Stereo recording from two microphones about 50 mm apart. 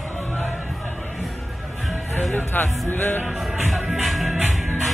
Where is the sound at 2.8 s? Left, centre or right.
Left.